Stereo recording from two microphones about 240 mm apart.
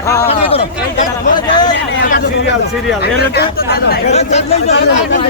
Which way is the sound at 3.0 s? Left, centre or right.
Left.